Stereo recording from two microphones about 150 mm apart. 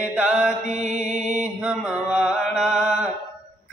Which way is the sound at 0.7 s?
50° right (ahead or behind).